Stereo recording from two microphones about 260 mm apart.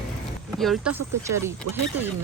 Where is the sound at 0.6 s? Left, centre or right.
Centre.